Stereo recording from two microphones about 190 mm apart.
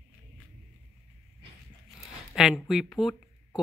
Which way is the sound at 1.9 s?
Centre (ahead or behind).